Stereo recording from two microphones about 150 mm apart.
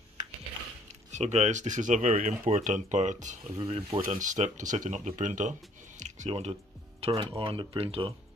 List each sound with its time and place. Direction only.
1.1 s speech: 50° right (ahead or behind)
3.6 s speech: 40° right (ahead or behind)
4.0 s speech: 55° right (ahead or behind)
7.0 s speech: 40° right (ahead or behind)